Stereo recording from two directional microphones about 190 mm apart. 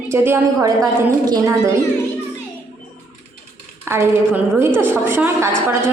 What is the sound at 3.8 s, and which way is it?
A woman's voice, 15° right (ahead or behind).